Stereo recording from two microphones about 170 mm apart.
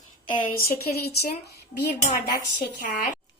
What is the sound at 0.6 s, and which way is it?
Speech, 70° left (ahead or behind).